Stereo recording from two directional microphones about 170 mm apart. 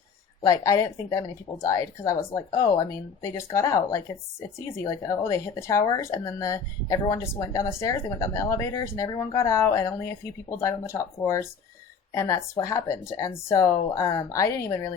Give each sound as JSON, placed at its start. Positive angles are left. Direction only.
{"t": 0.4, "sound": "speech", "side_deg": 20}
{"t": 12.1, "sound": "speech", "side_deg": 20}